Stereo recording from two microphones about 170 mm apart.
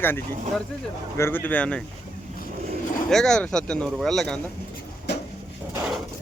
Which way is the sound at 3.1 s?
5° left (ahead or behind).